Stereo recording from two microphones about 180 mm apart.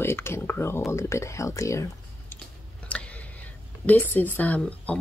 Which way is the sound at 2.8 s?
5° left (ahead or behind).